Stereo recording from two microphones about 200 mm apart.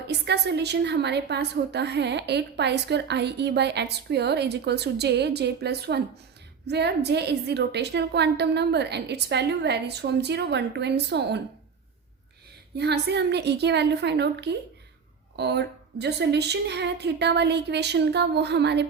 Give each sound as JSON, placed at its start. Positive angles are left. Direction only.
{"t": 0.1, "sound": "a woman's voice", "side_deg": -55}
{"t": 12.7, "sound": "a woman's voice", "side_deg": -55}